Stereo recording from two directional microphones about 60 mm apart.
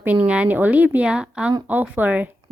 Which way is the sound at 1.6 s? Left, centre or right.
Right.